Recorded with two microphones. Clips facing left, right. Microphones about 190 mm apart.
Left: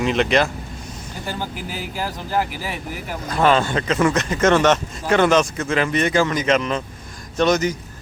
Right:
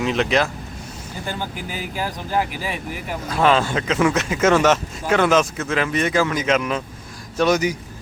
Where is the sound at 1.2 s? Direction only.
10° left (ahead or behind).